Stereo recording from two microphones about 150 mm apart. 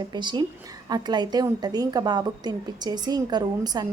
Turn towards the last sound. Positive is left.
turn(degrees=-25)  # may be behind; listen again after turning